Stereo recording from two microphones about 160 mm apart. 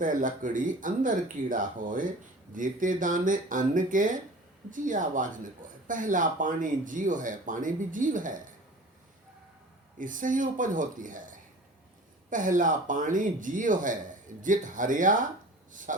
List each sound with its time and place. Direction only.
0.0 s speech: 55° right (ahead or behind)
10.0 s speech: 55° right (ahead or behind)